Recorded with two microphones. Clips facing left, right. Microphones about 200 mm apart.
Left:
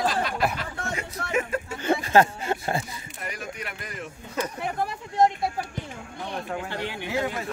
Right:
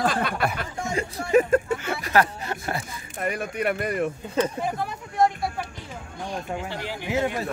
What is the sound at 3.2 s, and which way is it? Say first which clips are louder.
Speech: right 10 dB; 60° right (ahead or behind).